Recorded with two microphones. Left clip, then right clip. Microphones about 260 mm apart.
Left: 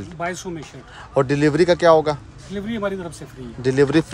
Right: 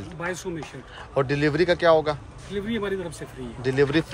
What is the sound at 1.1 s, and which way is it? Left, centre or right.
Speech, left.